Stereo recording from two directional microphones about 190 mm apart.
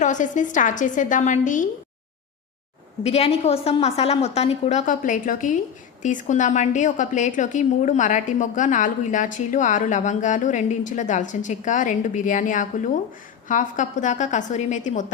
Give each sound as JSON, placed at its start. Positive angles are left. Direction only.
{"t": 0.0, "sound": "a woman's voice", "side_deg": 40}
{"t": 3.0, "sound": "a woman's voice", "side_deg": 30}